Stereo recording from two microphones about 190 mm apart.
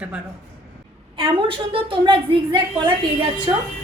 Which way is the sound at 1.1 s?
30° right (ahead or behind).